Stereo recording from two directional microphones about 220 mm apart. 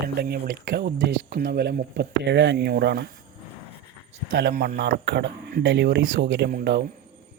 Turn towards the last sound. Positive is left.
turn(degrees=-45)  # may be behind; listen again after turning